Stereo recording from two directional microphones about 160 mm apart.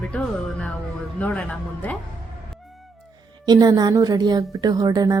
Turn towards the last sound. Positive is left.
turn(degrees=-25)  # may be behind; listen again after turning